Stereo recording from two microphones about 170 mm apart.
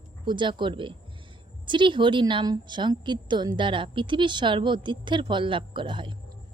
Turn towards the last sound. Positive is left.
turn(degrees=-30)  # may be behind; listen again after turning